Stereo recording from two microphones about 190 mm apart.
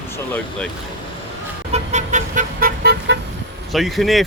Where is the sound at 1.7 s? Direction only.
35° right (ahead or behind); by 3.1 s 55° right (ahead or behind).